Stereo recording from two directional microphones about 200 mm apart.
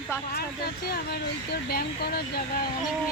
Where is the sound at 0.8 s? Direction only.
50° left (ahead or behind).